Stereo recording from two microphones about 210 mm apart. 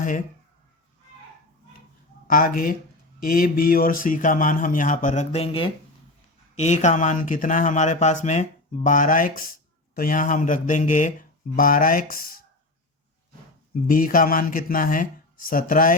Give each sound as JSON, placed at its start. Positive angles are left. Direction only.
{"t": 2.2, "sound": "speech", "side_deg": 40}
{"t": 13.8, "sound": "speech", "side_deg": 40}